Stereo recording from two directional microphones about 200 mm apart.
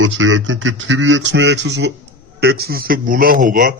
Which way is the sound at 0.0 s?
70° right (ahead or behind).